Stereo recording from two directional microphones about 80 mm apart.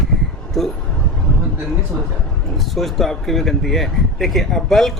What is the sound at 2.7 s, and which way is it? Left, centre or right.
Speech, centre.